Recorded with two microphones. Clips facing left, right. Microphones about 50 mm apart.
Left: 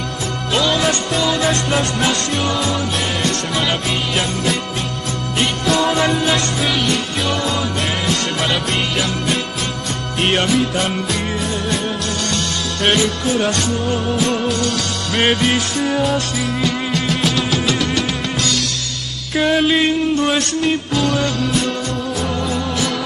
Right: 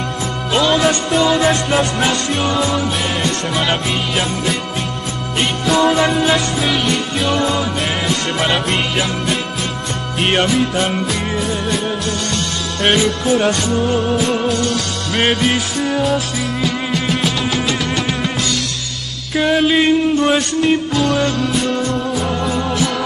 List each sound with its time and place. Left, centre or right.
0.5 s music: centre
1.2 s music: centre
1.5 s music: centre
5.4 s music: centre
12.8 s music: centre
19.3 s music: centre